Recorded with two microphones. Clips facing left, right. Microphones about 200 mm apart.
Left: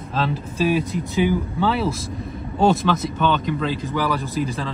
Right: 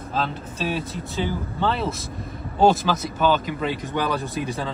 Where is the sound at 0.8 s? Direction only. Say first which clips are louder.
Left 6 dB; 15° left (ahead or behind); by 3.5 s 5° right (ahead or behind).